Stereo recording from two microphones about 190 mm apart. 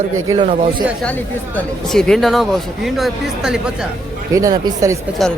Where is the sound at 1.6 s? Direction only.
5° left (ahead or behind).